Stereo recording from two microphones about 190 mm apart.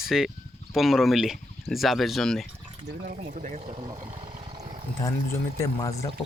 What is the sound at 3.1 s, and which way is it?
Speech, 45° right (ahead or behind).